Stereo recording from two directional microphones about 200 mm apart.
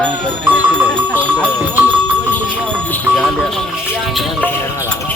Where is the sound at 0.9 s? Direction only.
5° left (ahead or behind).